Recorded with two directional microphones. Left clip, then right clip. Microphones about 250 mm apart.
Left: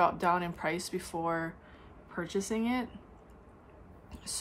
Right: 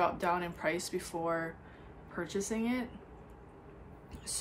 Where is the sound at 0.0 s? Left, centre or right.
Centre.